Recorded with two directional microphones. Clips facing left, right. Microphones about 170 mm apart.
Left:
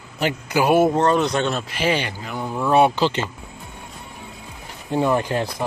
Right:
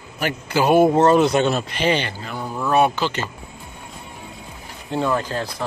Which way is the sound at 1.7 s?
5° left (ahead or behind).